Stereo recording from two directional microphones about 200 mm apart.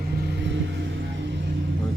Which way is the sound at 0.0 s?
50° right (ahead or behind).